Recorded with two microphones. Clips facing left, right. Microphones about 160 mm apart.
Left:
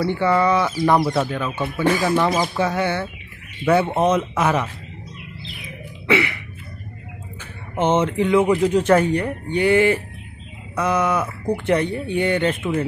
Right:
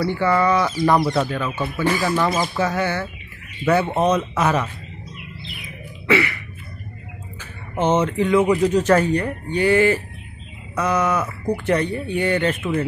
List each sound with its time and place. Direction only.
0.0 s speech: 15° left (ahead or behind)
2.3 s speech: 5° left (ahead or behind)
6.0 s a sound: 15° left (ahead or behind)
7.7 s speech: 25° left (ahead or behind)
8.0 s speech: 10° left (ahead or behind)